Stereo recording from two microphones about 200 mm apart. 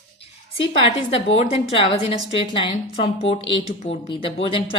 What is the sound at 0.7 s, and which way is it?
A woman's voice, 30° left (ahead or behind).